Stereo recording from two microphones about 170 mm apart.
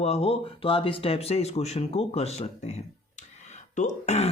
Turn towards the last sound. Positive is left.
turn(degrees=40)  # may be behind; listen again after turning